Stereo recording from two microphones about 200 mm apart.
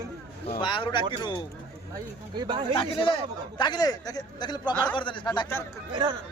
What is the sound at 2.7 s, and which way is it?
Speech, 25° left (ahead or behind).